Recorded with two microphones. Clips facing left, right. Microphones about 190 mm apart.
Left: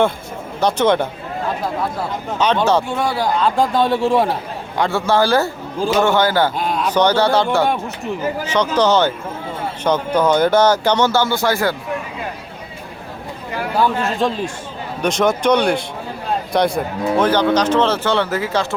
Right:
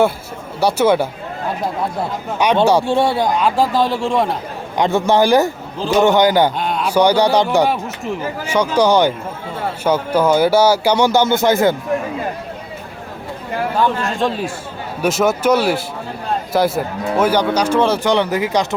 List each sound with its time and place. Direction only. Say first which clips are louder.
0.6 s speech: right 1 dB; 10° right (ahead or behind)
2.4 s speech: right 1 dB; 15° right (ahead or behind)
2.8 s speech: right 4 dB; 25° right (ahead or behind); by 4.4 s centre (ahead or behind)
4.8 s speech: right 2 dB; 20° right (ahead or behind)
6.6 s speech: right 1 dB; centre (ahead or behind); by 11.8 s 20° right (ahead or behind)
13.7 s speech: left 2 dB; centre (ahead or behind); by 18.7 s 15° right (ahead or behind)